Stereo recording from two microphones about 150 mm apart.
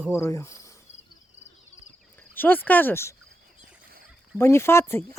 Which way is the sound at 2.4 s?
10° left (ahead or behind).